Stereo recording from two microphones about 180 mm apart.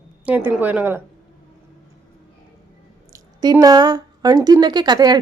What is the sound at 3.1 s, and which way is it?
Speech, 20° right (ahead or behind).